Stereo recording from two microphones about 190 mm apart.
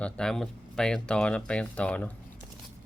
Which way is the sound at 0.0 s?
5° left (ahead or behind).